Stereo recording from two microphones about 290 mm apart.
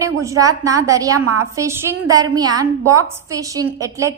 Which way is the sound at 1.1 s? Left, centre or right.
Right.